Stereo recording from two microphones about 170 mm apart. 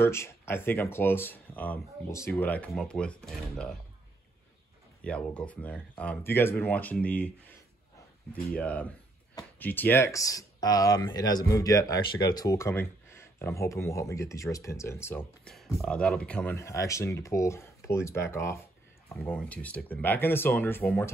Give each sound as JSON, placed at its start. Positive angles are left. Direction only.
{"t": 0.0, "sound": "speech", "side_deg": 15}
{"t": 5.0, "sound": "speech", "side_deg": 5}
{"t": 8.5, "sound": "speech", "side_deg": 10}
{"t": 15.5, "sound": "speech", "side_deg": 0}